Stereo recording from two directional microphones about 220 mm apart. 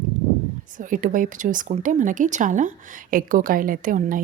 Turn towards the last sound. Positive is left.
turn(degrees=-40)  # may be behind; listen again after turning